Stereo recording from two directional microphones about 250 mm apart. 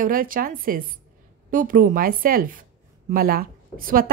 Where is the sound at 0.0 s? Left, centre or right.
Right.